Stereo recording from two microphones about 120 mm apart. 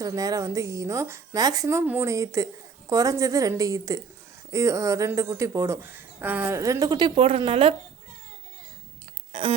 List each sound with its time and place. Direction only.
0.0 s a woman's voice: 30° right (ahead or behind); by 6.6 s 15° right (ahead or behind)
6.6 s a woman's voice: 30° right (ahead or behind); by 7.8 s 55° right (ahead or behind)
9.3 s a sound: 50° right (ahead or behind)